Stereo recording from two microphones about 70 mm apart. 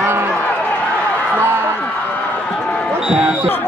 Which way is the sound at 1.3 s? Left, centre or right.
Right.